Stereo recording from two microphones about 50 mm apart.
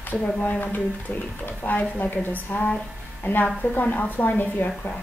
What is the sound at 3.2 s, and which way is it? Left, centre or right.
A woman's voice, left.